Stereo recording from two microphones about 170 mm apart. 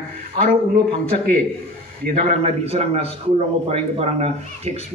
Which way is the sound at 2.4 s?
35° right (ahead or behind).